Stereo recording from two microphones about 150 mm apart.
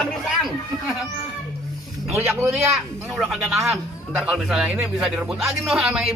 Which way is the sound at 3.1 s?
Centre (ahead or behind).